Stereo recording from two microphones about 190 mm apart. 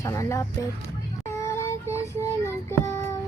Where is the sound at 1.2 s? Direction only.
15° left (ahead or behind).